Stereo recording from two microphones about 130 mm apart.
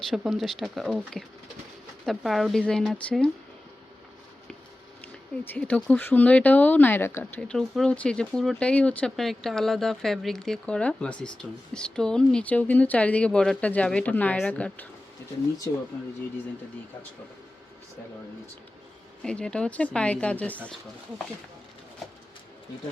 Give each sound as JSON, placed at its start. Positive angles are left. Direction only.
{"t": 0.1, "sound": "speech", "side_deg": 0}
{"t": 2.0, "sound": "speech", "side_deg": 0}
{"t": 5.5, "sound": "speech", "side_deg": 10}
{"t": 15.7, "sound": "speech", "side_deg": 25}
{"t": 19.2, "sound": "speech", "side_deg": 5}